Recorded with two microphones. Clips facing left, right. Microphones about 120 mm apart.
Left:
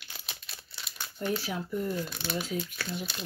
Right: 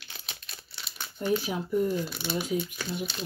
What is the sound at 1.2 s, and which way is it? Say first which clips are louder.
Speech: right 4 dB; 15° right (ahead or behind).